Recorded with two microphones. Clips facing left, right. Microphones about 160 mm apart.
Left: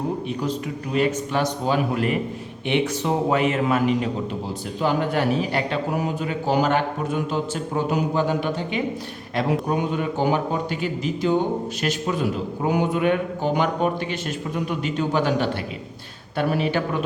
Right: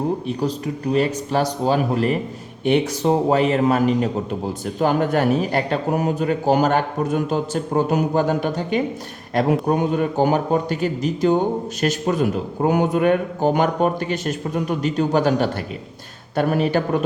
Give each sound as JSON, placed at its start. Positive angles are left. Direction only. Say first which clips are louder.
{"t": 0.9, "sound": "a man's voice", "louder": "right 1 dB", "side_deg": -35}